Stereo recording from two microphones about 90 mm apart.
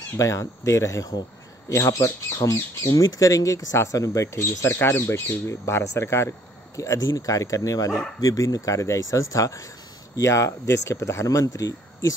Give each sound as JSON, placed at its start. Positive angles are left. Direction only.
{"t": 0.2, "sound": "speech", "side_deg": 35}